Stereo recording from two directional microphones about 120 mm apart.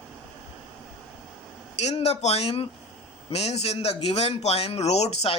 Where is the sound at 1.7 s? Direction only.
65° left (ahead or behind).